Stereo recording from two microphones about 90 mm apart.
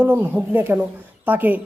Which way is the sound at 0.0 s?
25° right (ahead or behind).